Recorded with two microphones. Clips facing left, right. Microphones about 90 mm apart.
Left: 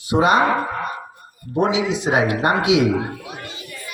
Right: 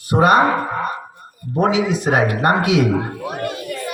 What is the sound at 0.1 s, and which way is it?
Speech, 50° right (ahead or behind).